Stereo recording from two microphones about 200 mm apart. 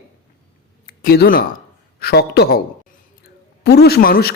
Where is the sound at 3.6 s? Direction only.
55° left (ahead or behind).